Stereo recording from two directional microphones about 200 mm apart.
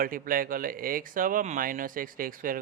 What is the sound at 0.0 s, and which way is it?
Speech, 45° right (ahead or behind).